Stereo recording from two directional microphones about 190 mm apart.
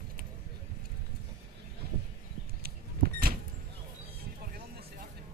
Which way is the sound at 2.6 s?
50° right (ahead or behind).